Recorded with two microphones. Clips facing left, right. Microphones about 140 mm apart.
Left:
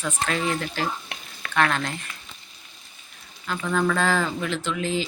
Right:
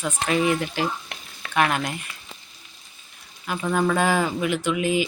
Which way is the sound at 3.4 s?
20° right (ahead or behind).